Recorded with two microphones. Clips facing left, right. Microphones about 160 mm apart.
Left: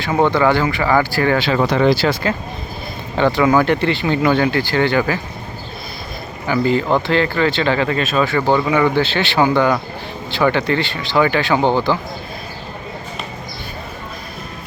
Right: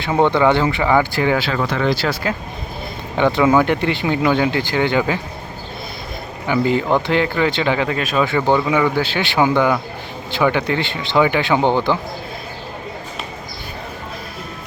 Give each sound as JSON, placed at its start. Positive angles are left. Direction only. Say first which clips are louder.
{"t": 0.3, "sound": "speech", "louder": "even", "side_deg": -20}
{"t": 1.9, "sound": "speech", "louder": "left 4 dB", "side_deg": 0}
{"t": 3.2, "sound": "speech", "louder": "even", "side_deg": -15}
{"t": 6.5, "sound": "speech", "louder": "left 1 dB", "side_deg": -15}